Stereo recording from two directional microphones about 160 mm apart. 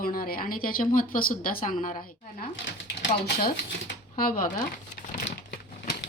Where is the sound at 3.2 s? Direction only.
90° left.